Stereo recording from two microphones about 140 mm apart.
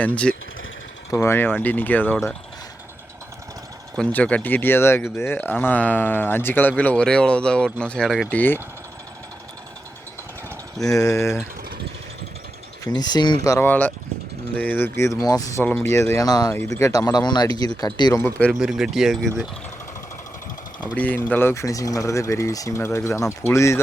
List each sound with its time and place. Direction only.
0.0 s speech: 10° left (ahead or behind)
3.9 s speech: 10° left (ahead or behind)
8.3 s speech: 10° left (ahead or behind)
10.8 s speech: 25° left (ahead or behind)
12.8 s speech: 30° left (ahead or behind)
18.2 s speech: 10° left (ahead or behind)
18.6 s speech: 5° right (ahead or behind)
20.9 s speech: 10° left (ahead or behind)